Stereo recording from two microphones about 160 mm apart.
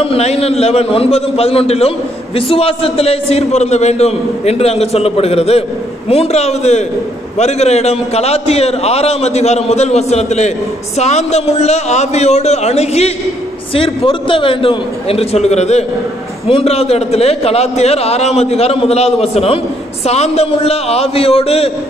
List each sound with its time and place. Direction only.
0.0 s a man's voice: 40° left (ahead or behind)